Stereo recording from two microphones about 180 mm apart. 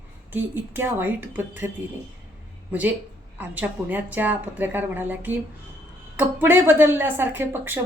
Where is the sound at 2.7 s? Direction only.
10° right (ahead or behind).